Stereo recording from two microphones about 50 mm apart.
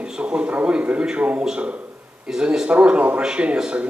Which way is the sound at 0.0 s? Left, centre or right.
Right.